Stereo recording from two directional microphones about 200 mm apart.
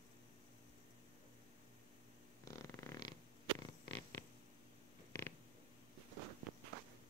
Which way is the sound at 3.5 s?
15° left (ahead or behind).